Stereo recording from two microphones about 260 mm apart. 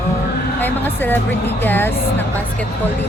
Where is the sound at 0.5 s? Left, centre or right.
Centre.